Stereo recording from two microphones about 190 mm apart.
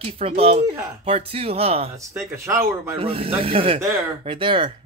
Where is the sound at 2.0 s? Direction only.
15° right (ahead or behind).